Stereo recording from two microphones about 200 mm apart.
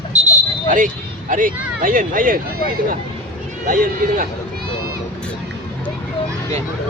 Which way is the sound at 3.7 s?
45° right (ahead or behind).